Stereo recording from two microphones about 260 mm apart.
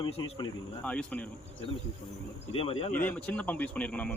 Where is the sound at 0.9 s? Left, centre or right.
Centre.